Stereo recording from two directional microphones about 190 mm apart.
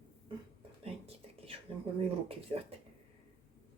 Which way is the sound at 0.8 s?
30° right (ahead or behind).